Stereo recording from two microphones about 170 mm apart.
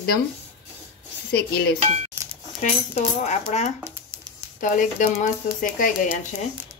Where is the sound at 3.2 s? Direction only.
45° left (ahead or behind).